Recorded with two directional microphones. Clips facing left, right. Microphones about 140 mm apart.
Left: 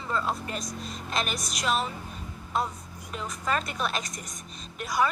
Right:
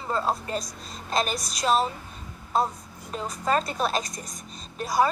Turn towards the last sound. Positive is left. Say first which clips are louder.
# right 4 dB
turn(degrees=-35)  # may be behind; listen again after turning